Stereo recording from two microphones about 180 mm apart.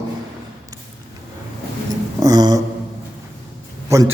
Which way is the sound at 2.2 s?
20° right (ahead or behind).